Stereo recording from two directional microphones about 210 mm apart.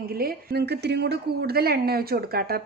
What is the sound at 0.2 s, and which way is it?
Speech, 45° right (ahead or behind).